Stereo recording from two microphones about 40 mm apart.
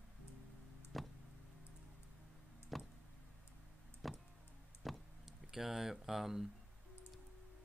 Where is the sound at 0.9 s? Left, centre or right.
Centre.